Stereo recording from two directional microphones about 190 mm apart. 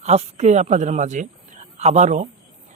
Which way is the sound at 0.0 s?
35° right (ahead or behind).